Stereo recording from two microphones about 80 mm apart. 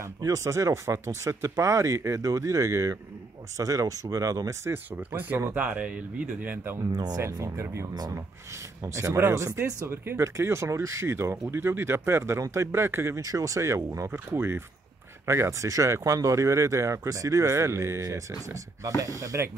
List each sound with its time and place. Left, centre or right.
0.0 s speech: right
4.9 s speech: right
6.9 s speech: right
7.2 s speech: right